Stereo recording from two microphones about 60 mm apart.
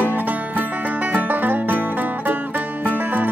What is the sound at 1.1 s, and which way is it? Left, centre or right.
Music, right.